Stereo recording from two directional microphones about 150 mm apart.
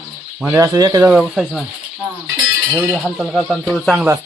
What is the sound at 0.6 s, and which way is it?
Speech, 25° right (ahead or behind).